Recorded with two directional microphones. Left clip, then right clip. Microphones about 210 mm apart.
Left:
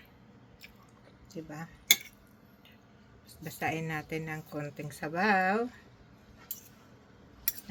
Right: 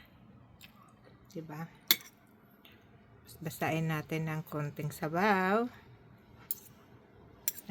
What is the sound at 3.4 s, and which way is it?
Speech, 50° right (ahead or behind).